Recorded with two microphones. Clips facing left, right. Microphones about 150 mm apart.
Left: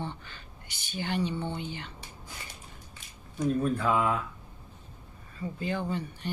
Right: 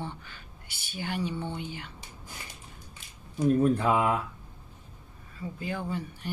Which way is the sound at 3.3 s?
25° right (ahead or behind).